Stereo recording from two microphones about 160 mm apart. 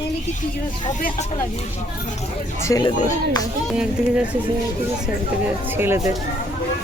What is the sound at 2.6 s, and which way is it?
Speech, 20° left (ahead or behind).